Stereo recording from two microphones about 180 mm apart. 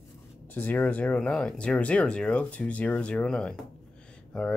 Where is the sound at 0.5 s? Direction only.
10° left (ahead or behind).